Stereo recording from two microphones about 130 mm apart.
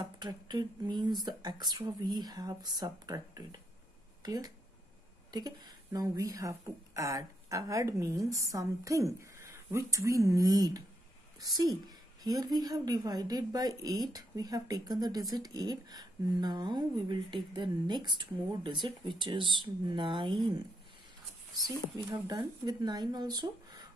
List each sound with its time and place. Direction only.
0.0 s speech: 30° right (ahead or behind)
22.0 s speech: 30° right (ahead or behind)